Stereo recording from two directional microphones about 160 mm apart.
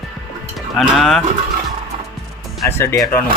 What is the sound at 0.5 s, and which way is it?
Cattle, centre (ahead or behind).